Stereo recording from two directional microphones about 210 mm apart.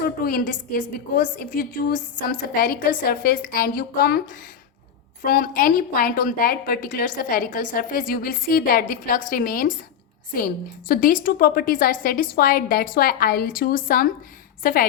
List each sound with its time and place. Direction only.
0.0 s a woman's voice: 45° left (ahead or behind)